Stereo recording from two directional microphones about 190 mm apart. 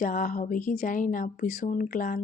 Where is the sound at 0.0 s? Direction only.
45° left (ahead or behind).